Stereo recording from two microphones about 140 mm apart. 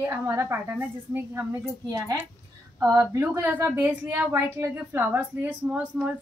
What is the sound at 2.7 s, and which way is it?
A woman's voice, 20° right (ahead or behind).